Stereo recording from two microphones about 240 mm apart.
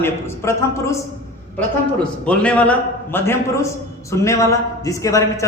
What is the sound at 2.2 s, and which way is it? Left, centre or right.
A man's voice, centre.